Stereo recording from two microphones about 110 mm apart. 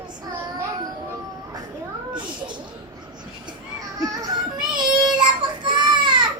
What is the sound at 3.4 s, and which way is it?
Baby cry, 30° right (ahead or behind).